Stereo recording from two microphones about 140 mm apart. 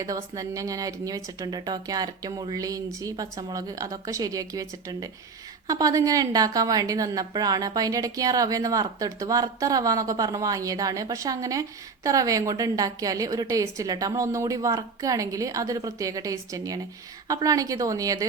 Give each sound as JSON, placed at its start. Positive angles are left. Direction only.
{"t": 0.0, "sound": "a woman's voice", "side_deg": -25}